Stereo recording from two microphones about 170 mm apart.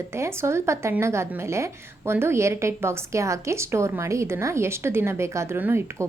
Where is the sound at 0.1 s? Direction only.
15° right (ahead or behind).